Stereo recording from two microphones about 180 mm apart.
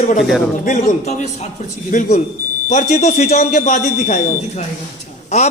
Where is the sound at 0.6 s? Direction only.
45° left (ahead or behind).